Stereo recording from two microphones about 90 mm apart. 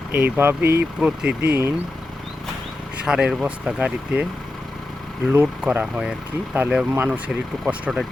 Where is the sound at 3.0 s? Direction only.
10° right (ahead or behind).